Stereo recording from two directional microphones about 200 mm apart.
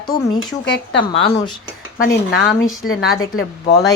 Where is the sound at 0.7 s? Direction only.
60° left (ahead or behind).